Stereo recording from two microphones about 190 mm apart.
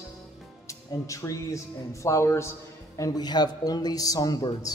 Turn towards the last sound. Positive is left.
turn(degrees=20)  # may be behind; listen again after turning